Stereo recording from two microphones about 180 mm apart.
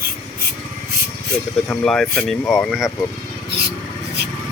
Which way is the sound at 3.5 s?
65° right (ahead or behind).